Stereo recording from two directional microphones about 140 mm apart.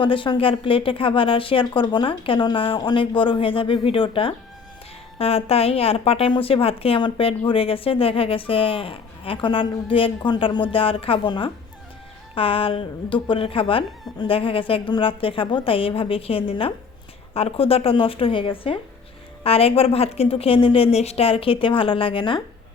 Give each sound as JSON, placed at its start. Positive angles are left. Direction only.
{"t": 0.0, "sound": "a woman's voice", "side_deg": 35}